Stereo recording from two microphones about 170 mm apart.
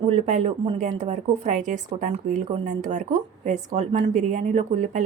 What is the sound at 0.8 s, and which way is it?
A woman's voice, 45° right (ahead or behind).